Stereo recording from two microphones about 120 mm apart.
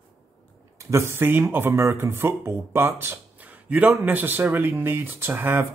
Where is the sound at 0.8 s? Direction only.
25° right (ahead or behind).